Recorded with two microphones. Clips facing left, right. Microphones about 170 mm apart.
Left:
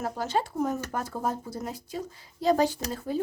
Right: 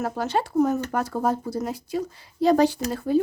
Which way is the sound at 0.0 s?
65° right (ahead or behind).